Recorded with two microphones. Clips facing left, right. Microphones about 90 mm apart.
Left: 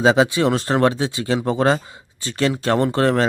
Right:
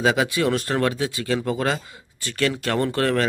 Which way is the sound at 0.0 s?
25° left (ahead or behind).